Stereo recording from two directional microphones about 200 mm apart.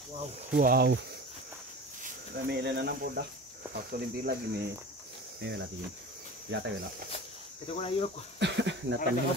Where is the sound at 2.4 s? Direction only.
55° right (ahead or behind).